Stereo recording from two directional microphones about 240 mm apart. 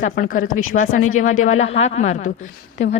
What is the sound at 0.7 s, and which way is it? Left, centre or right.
Speech, left.